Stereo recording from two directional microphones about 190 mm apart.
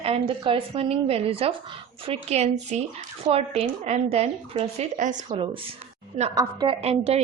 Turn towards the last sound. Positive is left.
turn(degrees=-35)  # may be behind; listen again after turning